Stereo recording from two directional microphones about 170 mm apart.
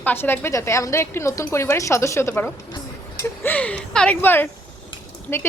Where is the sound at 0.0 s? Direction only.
10° left (ahead or behind).